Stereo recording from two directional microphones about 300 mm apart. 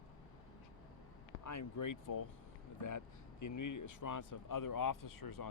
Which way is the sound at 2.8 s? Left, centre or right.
Left.